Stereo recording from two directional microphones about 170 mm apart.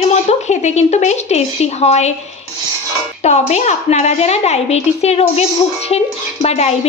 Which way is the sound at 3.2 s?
40° left (ahead or behind).